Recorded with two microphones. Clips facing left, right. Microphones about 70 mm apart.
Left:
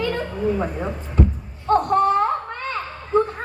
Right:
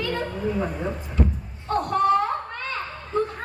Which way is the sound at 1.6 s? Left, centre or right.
Left.